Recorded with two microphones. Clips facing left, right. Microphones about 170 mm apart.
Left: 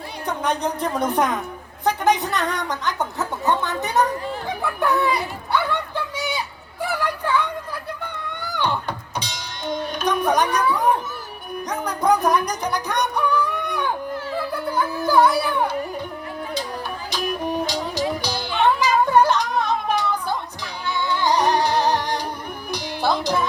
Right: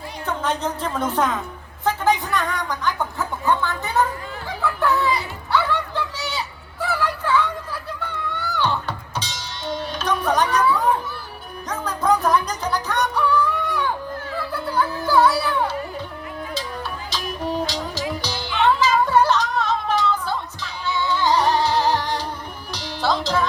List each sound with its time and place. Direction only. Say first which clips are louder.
0.3 s a woman's voice: left 1 dB; 15° left (ahead or behind)
4.6 s music: right 1 dB; 15° left (ahead or behind)
17.4 s music: left 1 dB; 15° left (ahead or behind)